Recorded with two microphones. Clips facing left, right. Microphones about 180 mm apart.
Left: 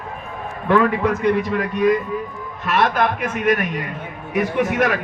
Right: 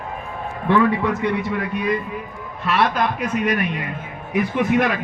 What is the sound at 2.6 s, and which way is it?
A man's voice, 45° left (ahead or behind).